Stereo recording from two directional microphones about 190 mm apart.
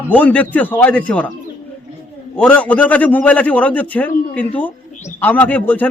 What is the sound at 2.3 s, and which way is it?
A man's voice, 5° left (ahead or behind).